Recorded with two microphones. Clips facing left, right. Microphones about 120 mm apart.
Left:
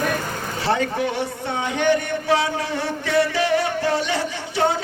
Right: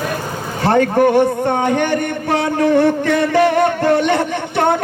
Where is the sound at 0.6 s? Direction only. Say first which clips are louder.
Right 9 dB; 55° right (ahead or behind).